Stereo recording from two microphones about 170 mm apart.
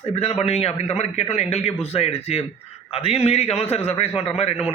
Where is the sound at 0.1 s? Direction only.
35° left (ahead or behind).